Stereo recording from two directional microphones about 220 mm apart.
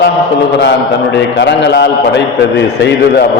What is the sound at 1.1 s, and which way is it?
A man's voice, 55° left (ahead or behind).